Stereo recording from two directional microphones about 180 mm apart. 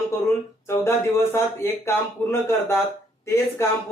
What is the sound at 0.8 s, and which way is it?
Speech, 15° left (ahead or behind).